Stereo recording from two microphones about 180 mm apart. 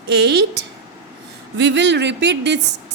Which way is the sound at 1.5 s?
85° right.